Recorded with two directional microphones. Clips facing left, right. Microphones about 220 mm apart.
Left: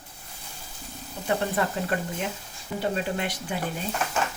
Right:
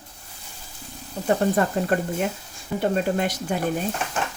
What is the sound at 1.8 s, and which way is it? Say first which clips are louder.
Speech: right 6 dB; 45° right (ahead or behind).